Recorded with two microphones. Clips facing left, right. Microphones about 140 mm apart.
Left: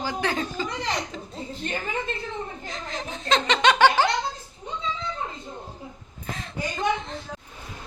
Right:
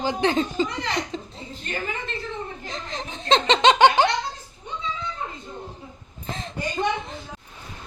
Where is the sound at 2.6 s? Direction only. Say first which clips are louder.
Even; 25° right (ahead or behind).